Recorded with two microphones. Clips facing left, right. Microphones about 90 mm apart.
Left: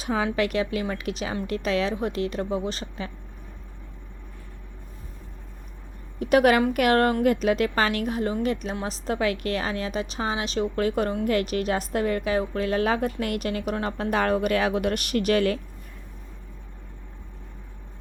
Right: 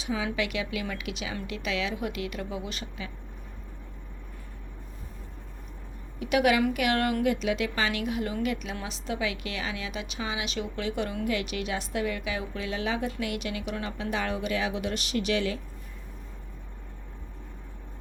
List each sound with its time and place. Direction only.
0.0 s a woman's voice: 50° left (ahead or behind)
6.1 s a woman's voice: 45° left (ahead or behind)